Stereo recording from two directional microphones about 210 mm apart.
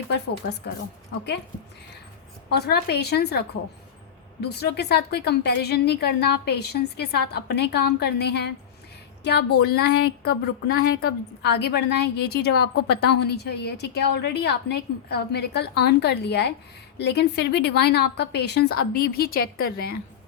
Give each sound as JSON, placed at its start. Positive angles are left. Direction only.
{"t": 2.5, "sound": "a woman's voice", "side_deg": 50}
{"t": 9.6, "sound": "a woman's voice", "side_deg": 50}